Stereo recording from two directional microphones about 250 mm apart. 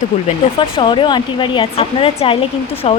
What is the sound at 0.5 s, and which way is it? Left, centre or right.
Speech, centre.